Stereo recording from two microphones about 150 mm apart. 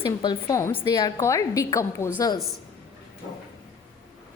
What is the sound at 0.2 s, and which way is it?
A woman's voice, 25° left (ahead or behind).